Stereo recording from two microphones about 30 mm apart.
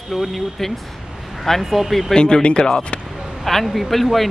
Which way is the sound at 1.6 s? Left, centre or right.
Centre.